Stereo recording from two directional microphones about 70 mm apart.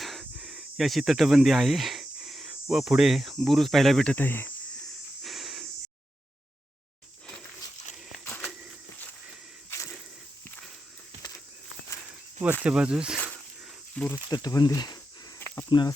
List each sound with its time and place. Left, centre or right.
0.0 s a sound: centre
0.3 s snake: centre
3.4 s speech: centre
4.0 s speech: left
5.2 s a sound: centre
8.2 s walk: left
9.6 s a sound: left
12.4 s speech: right
13.1 s snake: centre
14.3 s speech: left